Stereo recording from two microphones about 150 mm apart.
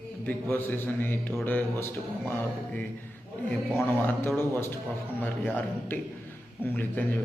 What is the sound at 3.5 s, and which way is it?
A man's voice, 15° left (ahead or behind).